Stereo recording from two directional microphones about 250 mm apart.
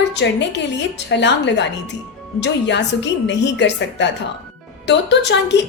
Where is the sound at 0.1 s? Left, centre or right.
Left.